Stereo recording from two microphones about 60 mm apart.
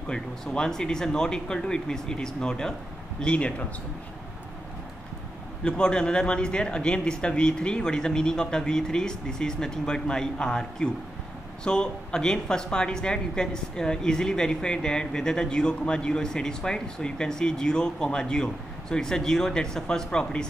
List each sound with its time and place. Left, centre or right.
0.1 s speech: centre
5.6 s speech: centre